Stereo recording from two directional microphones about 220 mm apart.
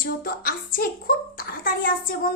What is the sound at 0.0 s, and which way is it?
A woman's voice, 40° left (ahead or behind).